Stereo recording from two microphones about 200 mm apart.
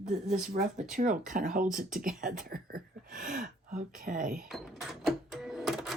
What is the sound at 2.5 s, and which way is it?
Speech, 45° right (ahead or behind).